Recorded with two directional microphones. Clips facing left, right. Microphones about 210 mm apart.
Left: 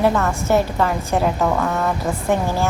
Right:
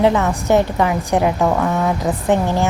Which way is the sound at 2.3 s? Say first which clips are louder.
Right 3 dB; 20° right (ahead or behind).